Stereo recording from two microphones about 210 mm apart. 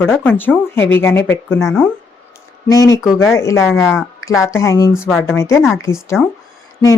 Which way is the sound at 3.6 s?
Centre (ahead or behind).